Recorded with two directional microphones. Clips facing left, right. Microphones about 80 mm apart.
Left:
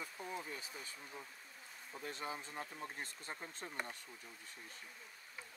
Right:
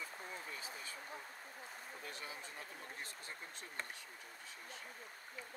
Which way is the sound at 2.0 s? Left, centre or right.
Left.